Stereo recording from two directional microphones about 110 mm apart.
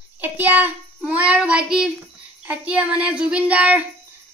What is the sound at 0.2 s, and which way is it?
A child's voice, 15° right (ahead or behind).